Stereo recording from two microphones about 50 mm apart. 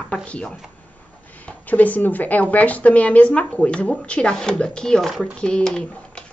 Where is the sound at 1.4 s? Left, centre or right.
Left; by 6.2 s centre.